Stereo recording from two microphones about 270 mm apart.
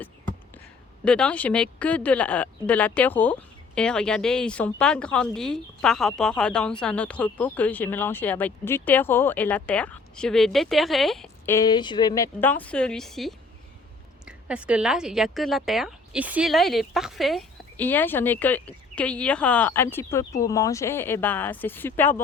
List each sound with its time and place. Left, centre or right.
1.0 s speech: centre